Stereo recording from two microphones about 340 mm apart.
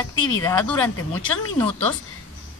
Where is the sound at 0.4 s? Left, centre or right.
Centre.